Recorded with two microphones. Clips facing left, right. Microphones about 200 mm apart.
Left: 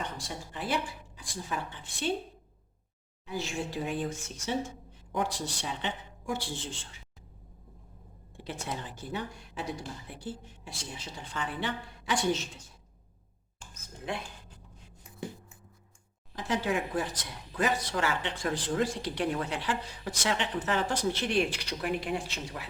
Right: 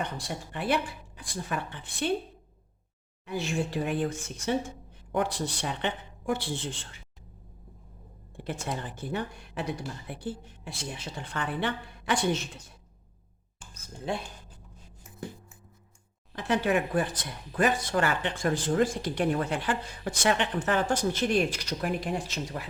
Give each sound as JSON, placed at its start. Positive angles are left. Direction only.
{"t": 0.0, "sound": "a woman's voice", "side_deg": -60}
{"t": 3.2, "sound": "a woman's voice", "side_deg": -60}
{"t": 8.4, "sound": "a woman's voice", "side_deg": -50}
{"t": 16.3, "sound": "speech", "side_deg": -60}